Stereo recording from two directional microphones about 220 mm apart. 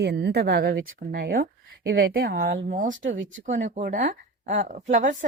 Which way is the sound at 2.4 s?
40° right (ahead or behind).